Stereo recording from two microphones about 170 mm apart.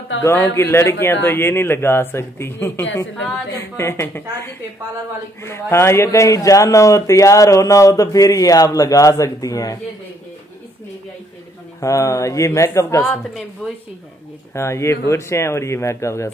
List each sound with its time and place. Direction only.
0.2 s a man's voice: 15° left (ahead or behind)
11.8 s speech: 20° left (ahead or behind)
13.6 s speech: centre (ahead or behind)
14.5 s speech: 15° left (ahead or behind)